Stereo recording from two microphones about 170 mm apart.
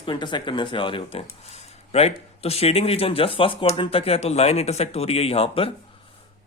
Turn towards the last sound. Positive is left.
turn(degrees=35)  # may be behind; listen again after turning